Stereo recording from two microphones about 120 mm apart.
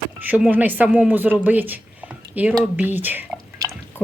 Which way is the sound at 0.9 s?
5° right (ahead or behind).